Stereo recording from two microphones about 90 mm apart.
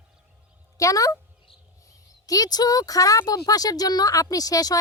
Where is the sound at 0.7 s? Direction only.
35° left (ahead or behind).